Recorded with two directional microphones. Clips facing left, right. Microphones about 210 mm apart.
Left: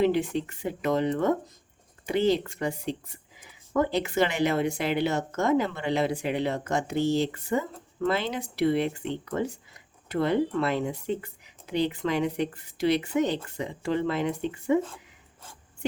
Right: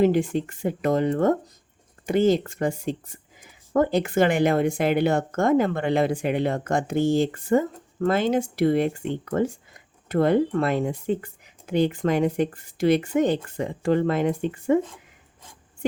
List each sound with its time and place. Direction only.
0.0 s speech: 45° right (ahead or behind)